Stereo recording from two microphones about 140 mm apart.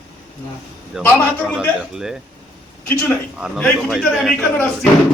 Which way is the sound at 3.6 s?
5° left (ahead or behind).